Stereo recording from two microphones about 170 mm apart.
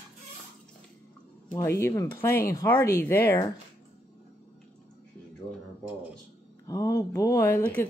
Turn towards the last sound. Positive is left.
turn(degrees=10)  # may be behind; listen again after turning